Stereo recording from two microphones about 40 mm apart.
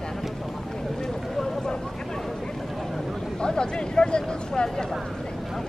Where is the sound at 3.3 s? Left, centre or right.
Left.